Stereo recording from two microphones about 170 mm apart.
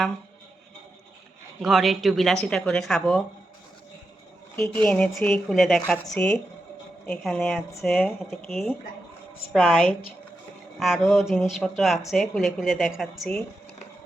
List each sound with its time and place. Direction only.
1.6 s speech: centre (ahead or behind)
4.8 s speech: 5° left (ahead or behind)